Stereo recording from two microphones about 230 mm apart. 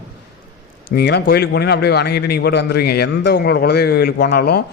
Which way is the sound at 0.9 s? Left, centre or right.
Left.